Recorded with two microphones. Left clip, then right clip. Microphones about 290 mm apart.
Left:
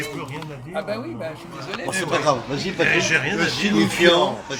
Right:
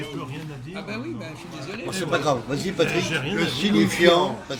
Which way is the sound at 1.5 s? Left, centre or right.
Centre.